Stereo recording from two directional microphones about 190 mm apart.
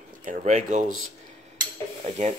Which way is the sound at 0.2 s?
45° right (ahead or behind).